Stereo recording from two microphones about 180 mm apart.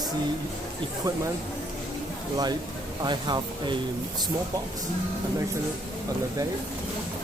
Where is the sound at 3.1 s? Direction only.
25° right (ahead or behind).